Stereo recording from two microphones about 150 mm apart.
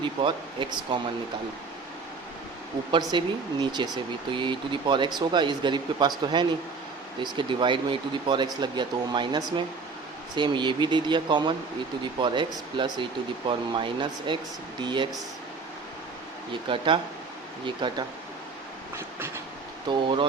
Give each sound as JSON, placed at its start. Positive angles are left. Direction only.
{"t": 0.0, "sound": "speech", "side_deg": -35}
{"t": 3.1, "sound": "speech", "side_deg": -30}
{"t": 16.5, "sound": "speech", "side_deg": -35}
{"t": 19.9, "sound": "speech", "side_deg": -35}